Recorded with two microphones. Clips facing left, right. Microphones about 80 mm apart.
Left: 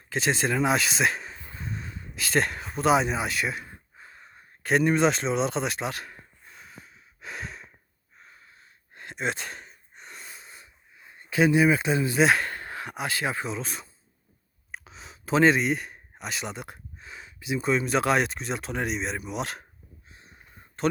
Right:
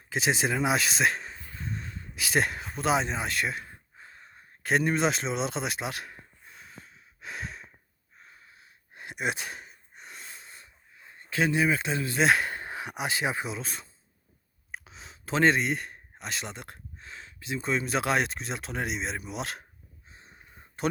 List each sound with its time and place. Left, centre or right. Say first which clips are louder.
0.1 s speech: left 1 dB; centre
1.5 s a sound: left 1 dB; centre
2.1 s a sound: left 1 dB; centre
8.2 s gasp: left 1 dB; centre
11.2 s speech: left 5 dB; centre
12.2 s speech: left 1 dB; centre
12.5 s speech: even; centre
13.6 s speech: left 3 dB; centre
20.1 s a sound: right 1 dB; right